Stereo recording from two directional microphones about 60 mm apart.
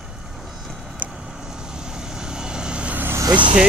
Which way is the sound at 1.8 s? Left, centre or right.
Centre.